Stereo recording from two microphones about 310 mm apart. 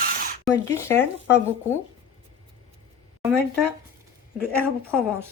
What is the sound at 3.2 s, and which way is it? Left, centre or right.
Speech, centre.